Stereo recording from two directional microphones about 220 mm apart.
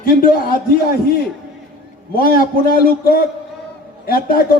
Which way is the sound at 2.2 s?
40° left (ahead or behind).